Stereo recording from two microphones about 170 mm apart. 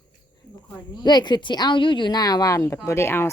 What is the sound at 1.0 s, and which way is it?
A woman's voice, 25° left (ahead or behind).